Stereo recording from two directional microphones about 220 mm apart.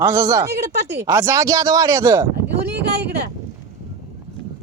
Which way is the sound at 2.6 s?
50° right (ahead or behind).